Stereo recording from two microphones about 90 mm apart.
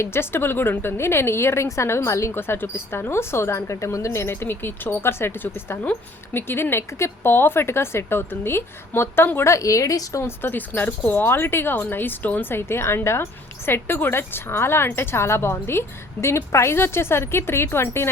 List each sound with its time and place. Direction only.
0.0 s a woman's voice: 25° left (ahead or behind)